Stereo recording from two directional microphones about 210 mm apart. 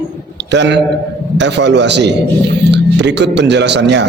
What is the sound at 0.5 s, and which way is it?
A man's voice, 55° right (ahead or behind).